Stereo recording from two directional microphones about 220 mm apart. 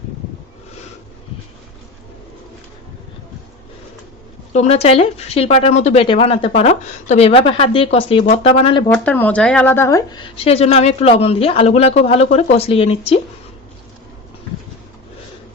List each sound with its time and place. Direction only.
4.5 s a woman's voice: 30° left (ahead or behind)
8.9 s a woman's voice: 5° left (ahead or behind); by 13.1 s 25° left (ahead or behind)